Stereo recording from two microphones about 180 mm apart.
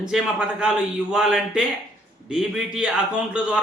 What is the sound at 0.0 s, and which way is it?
A man's voice, 5° right (ahead or behind).